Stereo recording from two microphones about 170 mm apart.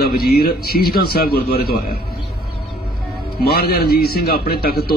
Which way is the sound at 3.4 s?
65° left (ahead or behind).